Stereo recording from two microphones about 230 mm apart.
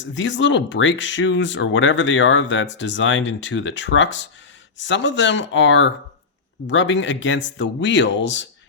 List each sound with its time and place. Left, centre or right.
0.0 s speech: left